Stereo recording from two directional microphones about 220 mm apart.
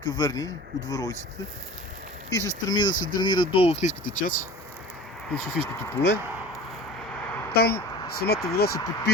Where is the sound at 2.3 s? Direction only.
15° left (ahead or behind).